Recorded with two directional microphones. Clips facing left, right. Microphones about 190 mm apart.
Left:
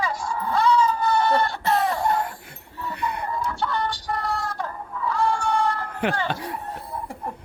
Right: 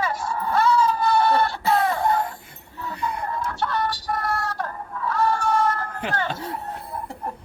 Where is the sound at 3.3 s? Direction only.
Centre (ahead or behind).